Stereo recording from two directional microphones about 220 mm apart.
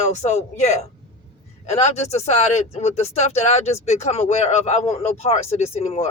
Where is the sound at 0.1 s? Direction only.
30° left (ahead or behind).